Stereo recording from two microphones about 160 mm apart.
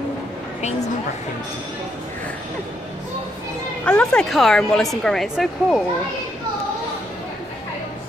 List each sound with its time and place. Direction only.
0.6 s a woman's voice: 45° left (ahead or behind)
3.8 s speech: 5° left (ahead or behind)